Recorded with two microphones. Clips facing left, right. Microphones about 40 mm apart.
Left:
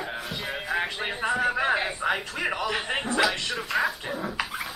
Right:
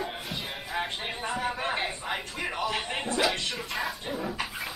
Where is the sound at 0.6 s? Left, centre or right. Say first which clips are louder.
Left 5 dB; left.